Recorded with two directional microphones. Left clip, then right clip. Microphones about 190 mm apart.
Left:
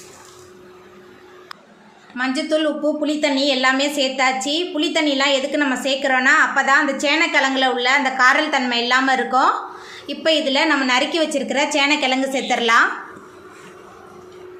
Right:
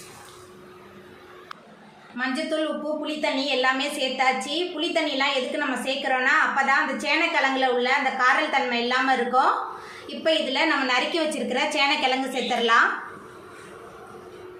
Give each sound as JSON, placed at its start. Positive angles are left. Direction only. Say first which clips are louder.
{"t": 2.1, "sound": "a woman's voice", "louder": "left 6 dB", "side_deg": 55}